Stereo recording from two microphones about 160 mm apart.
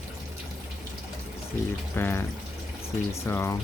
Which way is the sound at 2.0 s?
15° left (ahead or behind).